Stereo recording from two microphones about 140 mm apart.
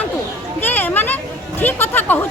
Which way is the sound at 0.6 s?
15° left (ahead or behind).